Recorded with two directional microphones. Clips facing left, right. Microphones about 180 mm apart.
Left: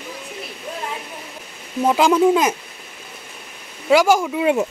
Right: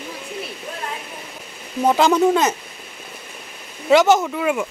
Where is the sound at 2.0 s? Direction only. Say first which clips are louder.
Left 2 dB; 10° left (ahead or behind).